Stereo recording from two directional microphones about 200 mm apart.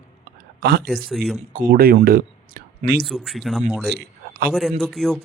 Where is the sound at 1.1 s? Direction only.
Centre (ahead or behind).